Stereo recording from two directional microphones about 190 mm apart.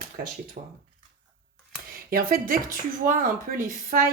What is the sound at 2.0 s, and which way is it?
Speech, 50° right (ahead or behind).